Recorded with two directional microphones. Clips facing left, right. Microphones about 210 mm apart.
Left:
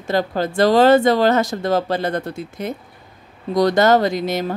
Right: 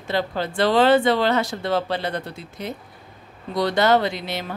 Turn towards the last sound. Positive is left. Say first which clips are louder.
# left 7 dB
turn(degrees=45)  # may be behind; listen again after turning